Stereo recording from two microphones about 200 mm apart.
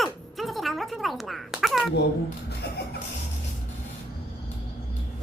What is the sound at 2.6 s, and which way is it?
Music, 55° left (ahead or behind).